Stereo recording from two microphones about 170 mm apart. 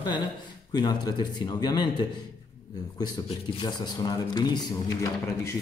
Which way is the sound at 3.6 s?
25° left (ahead or behind).